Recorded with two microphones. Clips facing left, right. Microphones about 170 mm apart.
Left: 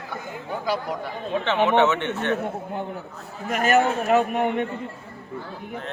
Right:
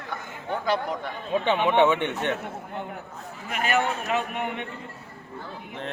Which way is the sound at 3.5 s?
45° left (ahead or behind).